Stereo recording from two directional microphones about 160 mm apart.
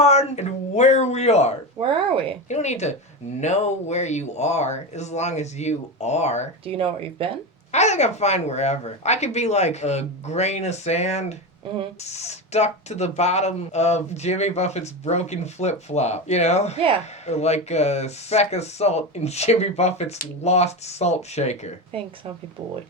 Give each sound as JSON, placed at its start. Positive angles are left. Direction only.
{"t": 0.0, "sound": "speech", "side_deg": 45}
{"t": 1.8, "sound": "speech", "side_deg": -35}
{"t": 2.5, "sound": "speech", "side_deg": 45}
{"t": 6.7, "sound": "speech", "side_deg": -35}
{"t": 7.7, "sound": "speech", "side_deg": 45}
{"t": 21.9, "sound": "speech", "side_deg": -35}